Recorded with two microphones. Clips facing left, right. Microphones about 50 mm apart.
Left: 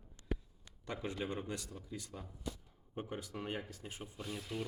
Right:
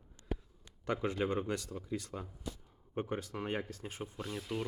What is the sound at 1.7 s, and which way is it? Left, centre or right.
Speech, right.